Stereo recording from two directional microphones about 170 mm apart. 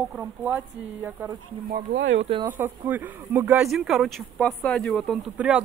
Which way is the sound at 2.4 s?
10° right (ahead or behind).